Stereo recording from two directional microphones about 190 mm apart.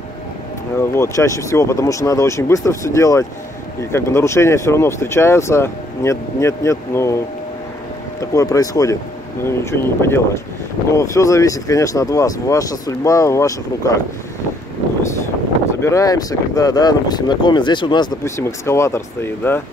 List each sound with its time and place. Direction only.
0.7 s speech: 15° left (ahead or behind)
8.2 s speech: 15° left (ahead or behind)
15.8 s speech: 15° left (ahead or behind)